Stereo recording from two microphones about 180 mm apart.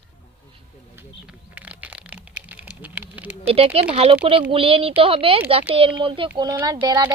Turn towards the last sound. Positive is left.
turn(degrees=-25)  # may be behind; listen again after turning